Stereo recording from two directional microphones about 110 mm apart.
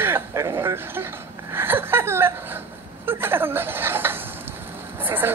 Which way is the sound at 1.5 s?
20° right (ahead or behind).